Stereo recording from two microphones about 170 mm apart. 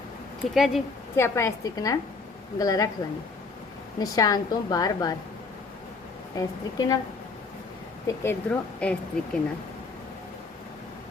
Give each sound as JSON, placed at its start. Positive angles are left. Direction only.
{"t": 0.5, "sound": "speech", "side_deg": 0}
{"t": 1.1, "sound": "a woman's voice", "side_deg": 15}
{"t": 4.0, "sound": "a woman's voice", "side_deg": 20}
{"t": 6.3, "sound": "a woman's voice", "side_deg": 20}
{"t": 8.0, "sound": "speech", "side_deg": 15}